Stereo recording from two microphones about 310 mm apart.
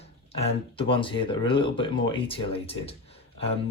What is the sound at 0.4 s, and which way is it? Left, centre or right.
Speech, centre.